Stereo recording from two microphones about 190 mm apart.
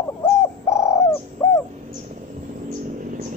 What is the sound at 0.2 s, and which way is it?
Bird, 15° left (ahead or behind).